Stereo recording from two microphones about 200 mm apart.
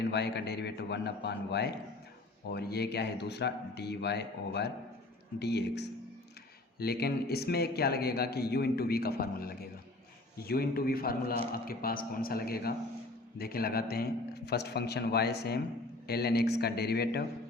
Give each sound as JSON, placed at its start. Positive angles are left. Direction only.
{"t": 0.0, "sound": "a man's voice", "side_deg": 55}